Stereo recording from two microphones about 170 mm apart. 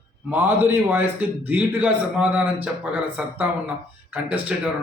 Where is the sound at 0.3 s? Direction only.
10° right (ahead or behind).